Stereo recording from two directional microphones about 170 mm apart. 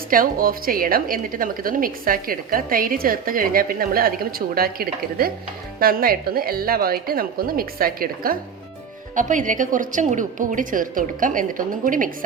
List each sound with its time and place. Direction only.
0.1 s a woman's voice: 55° right (ahead or behind)